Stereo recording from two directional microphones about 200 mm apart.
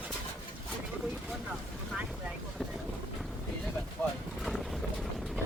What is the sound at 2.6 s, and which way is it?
Boat, 5° left (ahead or behind).